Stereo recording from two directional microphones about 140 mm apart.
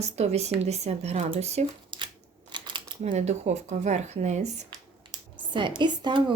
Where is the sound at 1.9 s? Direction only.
35° right (ahead or behind).